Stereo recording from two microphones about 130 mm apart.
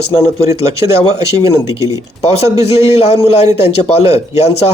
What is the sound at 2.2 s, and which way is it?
Speech, 50° left (ahead or behind).